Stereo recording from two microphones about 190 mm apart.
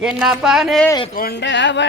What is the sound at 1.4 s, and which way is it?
Speech, 70° left (ahead or behind).